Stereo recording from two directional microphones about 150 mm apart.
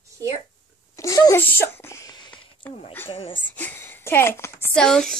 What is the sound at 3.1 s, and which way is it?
Speech, 40° left (ahead or behind).